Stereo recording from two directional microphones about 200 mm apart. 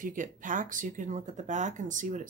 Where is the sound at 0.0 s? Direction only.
40° right (ahead or behind).